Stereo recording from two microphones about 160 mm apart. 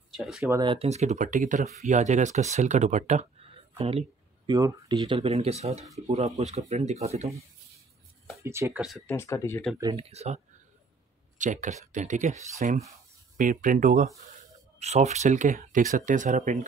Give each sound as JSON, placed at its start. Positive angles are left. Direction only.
{"t": 0.1, "sound": "speech", "side_deg": 0}
{"t": 0.6, "sound": "speech", "side_deg": -30}
{"t": 0.8, "sound": "speech", "side_deg": -45}
{"t": 4.5, "sound": "speech", "side_deg": -25}
{"t": 8.4, "sound": "speech", "side_deg": -15}
{"t": 9.0, "sound": "speech", "side_deg": 15}
{"t": 9.9, "sound": "speech", "side_deg": -40}
{"t": 13.4, "sound": "speech", "side_deg": -55}
{"t": 14.8, "sound": "speech", "side_deg": -45}